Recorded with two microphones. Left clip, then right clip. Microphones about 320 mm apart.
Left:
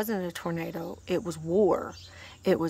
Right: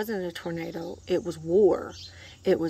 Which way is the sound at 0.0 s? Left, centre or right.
Left.